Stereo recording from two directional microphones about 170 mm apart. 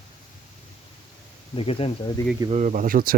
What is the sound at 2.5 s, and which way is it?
Speech, 45° right (ahead or behind).